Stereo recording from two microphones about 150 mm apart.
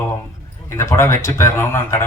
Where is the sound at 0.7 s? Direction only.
15° left (ahead or behind).